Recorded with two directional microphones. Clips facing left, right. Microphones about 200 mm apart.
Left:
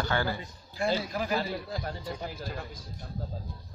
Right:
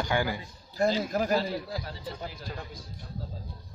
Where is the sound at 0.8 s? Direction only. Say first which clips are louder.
Right 3 dB; 40° right (ahead or behind).